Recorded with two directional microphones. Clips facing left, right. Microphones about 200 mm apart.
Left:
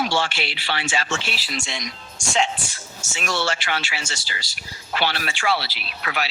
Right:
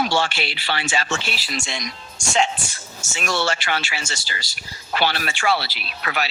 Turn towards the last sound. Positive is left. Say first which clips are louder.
# right 1 dB
turn(degrees=-45)  # may be behind; listen again after turning